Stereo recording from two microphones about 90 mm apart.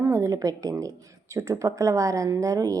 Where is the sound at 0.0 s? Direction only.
35° right (ahead or behind).